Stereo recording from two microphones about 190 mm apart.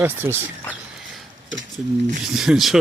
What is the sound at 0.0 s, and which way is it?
Speech, 10° right (ahead or behind).